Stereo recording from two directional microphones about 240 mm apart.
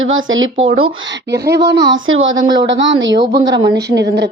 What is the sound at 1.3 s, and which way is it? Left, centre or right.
Speech, right.